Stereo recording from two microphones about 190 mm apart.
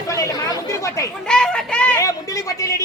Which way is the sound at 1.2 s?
5° left (ahead or behind).